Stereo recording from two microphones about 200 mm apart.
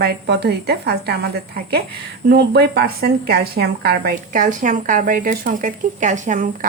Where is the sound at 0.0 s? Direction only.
55° right (ahead or behind).